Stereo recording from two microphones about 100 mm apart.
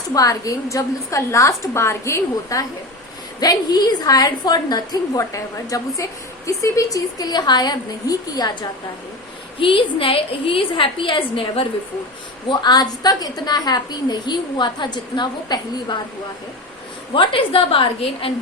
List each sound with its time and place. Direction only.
0.1 s a woman's voice: 35° left (ahead or behind)
3.4 s a woman's voice: 40° left (ahead or behind)
9.6 s a woman's voice: 60° left (ahead or behind)
12.5 s a woman's voice: 45° left (ahead or behind)
17.2 s a woman's voice: 65° left (ahead or behind)